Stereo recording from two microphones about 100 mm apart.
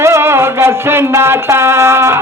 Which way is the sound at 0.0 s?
25° right (ahead or behind).